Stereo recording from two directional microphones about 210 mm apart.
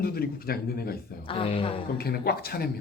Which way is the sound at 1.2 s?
25° left (ahead or behind).